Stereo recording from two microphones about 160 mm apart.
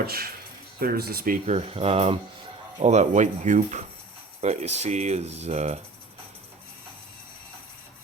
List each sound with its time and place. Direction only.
0.0 s speech: 75° right (ahead or behind)
1.5 s speech: 40° right (ahead or behind)